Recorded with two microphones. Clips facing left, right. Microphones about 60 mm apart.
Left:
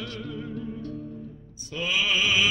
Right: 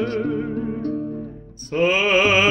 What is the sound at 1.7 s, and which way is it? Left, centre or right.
Music, right.